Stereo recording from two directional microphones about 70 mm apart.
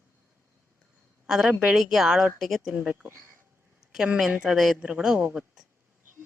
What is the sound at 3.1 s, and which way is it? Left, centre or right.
Speech, right.